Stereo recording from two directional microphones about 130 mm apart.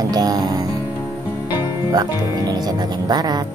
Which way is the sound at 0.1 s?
30° right (ahead or behind).